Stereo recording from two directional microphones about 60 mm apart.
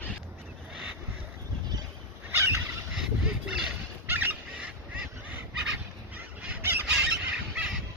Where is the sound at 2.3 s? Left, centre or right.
Right.